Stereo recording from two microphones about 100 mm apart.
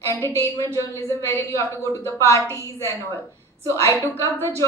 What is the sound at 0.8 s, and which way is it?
A woman's voice, 30° left (ahead or behind).